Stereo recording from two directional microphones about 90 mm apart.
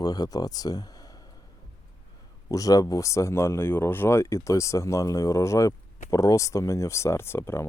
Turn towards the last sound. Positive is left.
turn(degrees=30)  # may be behind; listen again after turning